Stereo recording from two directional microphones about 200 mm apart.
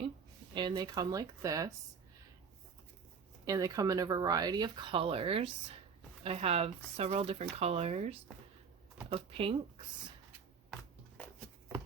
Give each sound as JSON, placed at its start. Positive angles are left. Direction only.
{"t": 0.5, "sound": "speech", "side_deg": -20}
{"t": 3.4, "sound": "speech", "side_deg": -15}